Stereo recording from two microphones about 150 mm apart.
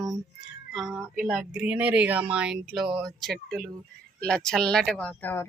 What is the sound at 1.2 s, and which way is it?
A woman's voice, centre (ahead or behind).